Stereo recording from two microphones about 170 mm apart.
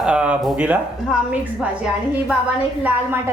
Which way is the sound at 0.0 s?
5° right (ahead or behind).